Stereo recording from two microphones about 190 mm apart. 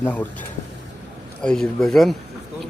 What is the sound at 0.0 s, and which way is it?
Speech, 10° left (ahead or behind).